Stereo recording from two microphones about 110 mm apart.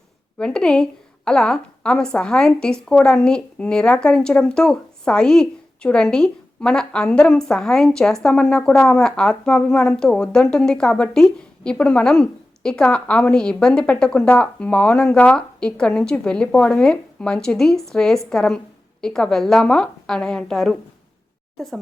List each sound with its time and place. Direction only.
0.3 s a woman's voice: 10° left (ahead or behind)